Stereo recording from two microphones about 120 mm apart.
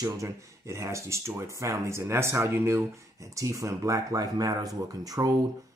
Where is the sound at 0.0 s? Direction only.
25° right (ahead or behind).